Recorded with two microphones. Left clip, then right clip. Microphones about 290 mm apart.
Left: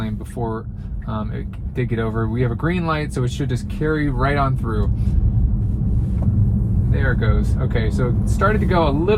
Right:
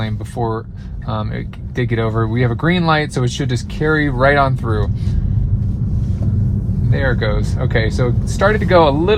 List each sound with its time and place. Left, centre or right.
1.7 s speech: right
7.2 s speech: right